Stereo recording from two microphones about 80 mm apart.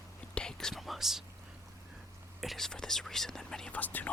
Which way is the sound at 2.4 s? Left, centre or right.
Centre.